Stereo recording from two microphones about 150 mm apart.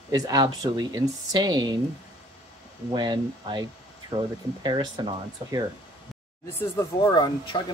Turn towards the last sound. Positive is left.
turn(degrees=30)  # may be behind; listen again after turning